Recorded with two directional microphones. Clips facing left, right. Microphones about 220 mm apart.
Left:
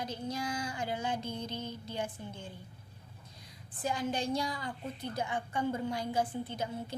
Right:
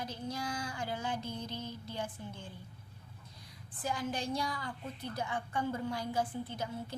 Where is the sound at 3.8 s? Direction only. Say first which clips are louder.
Left 3 dB; 20° left (ahead or behind).